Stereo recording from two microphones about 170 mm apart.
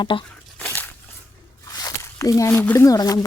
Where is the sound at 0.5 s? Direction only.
10° left (ahead or behind).